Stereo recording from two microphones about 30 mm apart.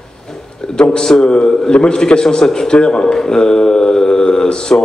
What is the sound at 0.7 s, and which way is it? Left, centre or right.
A man's voice, left.